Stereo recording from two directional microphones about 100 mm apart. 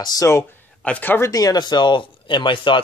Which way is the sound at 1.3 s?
40° left (ahead or behind).